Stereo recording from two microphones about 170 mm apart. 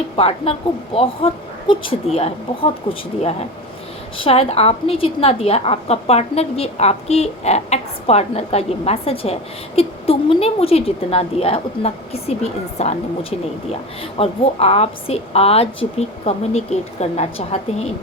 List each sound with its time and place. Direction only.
0.2 s a woman's voice: 35° left (ahead or behind)
4.2 s a woman's voice: 35° left (ahead or behind)